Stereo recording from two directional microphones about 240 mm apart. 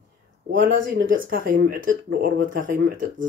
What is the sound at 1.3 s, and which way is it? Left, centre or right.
Speech, right.